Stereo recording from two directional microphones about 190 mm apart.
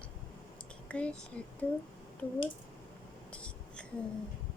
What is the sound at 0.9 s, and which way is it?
Speech, 5° left (ahead or behind).